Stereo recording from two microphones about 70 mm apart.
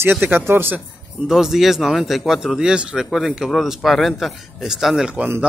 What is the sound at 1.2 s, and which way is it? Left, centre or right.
Speech, centre.